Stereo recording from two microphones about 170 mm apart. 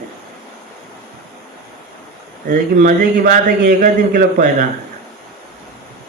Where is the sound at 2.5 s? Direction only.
55° right (ahead or behind).